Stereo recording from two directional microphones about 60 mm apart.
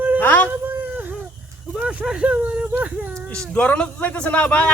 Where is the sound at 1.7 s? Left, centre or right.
Centre.